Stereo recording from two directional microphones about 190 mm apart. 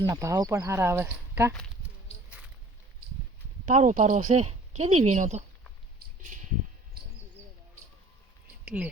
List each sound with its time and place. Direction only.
0.0 s speech: 20° right (ahead or behind)
3.7 s speech: 40° right (ahead or behind)
8.6 s speech: 5° right (ahead or behind)